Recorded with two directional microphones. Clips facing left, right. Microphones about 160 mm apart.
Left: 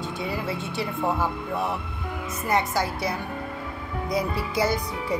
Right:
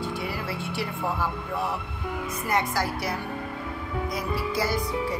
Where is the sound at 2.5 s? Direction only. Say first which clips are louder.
Left 2 dB; 25° left (ahead or behind).